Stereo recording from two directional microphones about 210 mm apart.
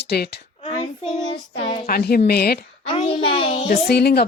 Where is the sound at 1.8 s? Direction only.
45° left (ahead or behind).